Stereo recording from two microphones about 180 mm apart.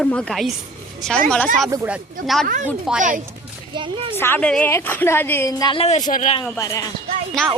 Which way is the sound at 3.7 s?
25° right (ahead or behind).